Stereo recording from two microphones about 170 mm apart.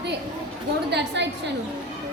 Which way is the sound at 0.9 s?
85° right.